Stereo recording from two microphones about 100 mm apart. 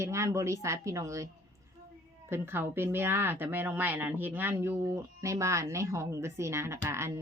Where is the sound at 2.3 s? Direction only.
20° right (ahead or behind).